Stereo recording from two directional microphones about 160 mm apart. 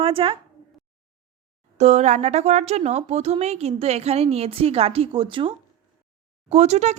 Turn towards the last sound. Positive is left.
turn(degrees=-45)  # may be behind; listen again after turning